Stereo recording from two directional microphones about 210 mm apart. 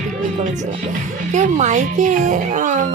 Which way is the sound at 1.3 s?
35° right (ahead or behind).